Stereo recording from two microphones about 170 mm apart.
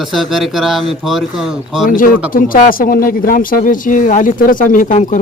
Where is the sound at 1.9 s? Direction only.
55° left (ahead or behind).